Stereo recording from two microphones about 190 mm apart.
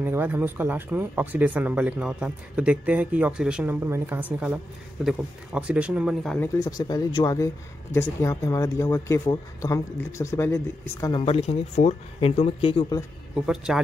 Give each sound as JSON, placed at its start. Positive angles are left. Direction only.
{"t": 0.0, "sound": "speech", "side_deg": -10}
{"t": 6.4, "sound": "speech", "side_deg": 20}
{"t": 13.7, "sound": "speech", "side_deg": -5}